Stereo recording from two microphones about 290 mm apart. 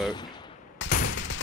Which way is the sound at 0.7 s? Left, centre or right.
Left.